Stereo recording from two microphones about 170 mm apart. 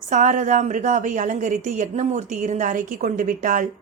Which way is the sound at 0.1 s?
50° right (ahead or behind).